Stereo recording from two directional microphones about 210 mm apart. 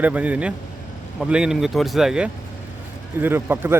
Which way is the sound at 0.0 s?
5° right (ahead or behind).